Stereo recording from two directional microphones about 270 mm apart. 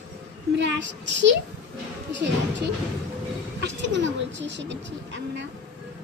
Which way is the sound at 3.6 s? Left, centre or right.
Right.